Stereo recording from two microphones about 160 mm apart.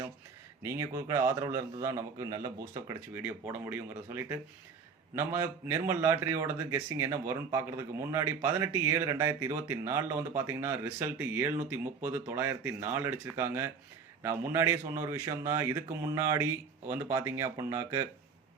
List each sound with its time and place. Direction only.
0.6 s a man's voice: 15° right (ahead or behind)